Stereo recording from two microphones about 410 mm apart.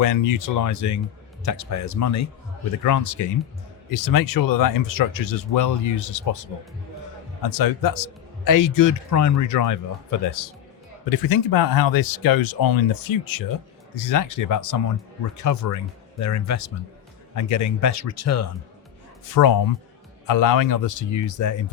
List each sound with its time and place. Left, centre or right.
0.0 s a man's voice: left
19.3 s a man's voice: left